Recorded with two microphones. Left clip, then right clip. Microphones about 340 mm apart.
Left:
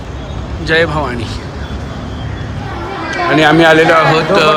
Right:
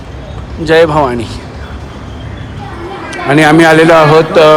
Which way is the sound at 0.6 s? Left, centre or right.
Centre.